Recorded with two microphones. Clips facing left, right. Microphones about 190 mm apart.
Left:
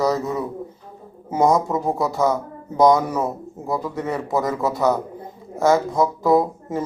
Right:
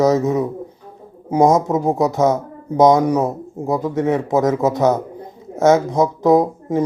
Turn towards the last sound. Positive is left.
turn(degrees=-20)  # may be behind; listen again after turning